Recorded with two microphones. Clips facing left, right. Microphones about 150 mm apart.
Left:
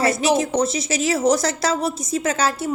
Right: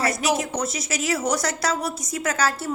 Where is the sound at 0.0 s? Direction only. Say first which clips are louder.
Left 5 dB; 25° left (ahead or behind).